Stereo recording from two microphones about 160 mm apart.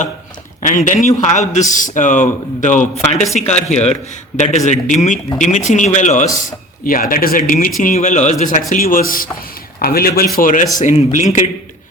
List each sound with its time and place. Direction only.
0.6 s speech: 55° left (ahead or behind)
6.8 s speech: 60° left (ahead or behind)
8.7 s speech: 60° left (ahead or behind)